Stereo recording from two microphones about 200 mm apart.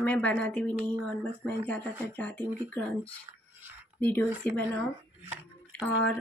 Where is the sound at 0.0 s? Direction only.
5° left (ahead or behind).